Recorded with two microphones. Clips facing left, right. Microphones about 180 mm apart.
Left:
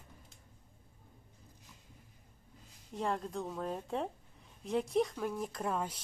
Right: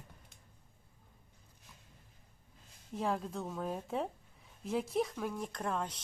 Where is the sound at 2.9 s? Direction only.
Centre (ahead or behind).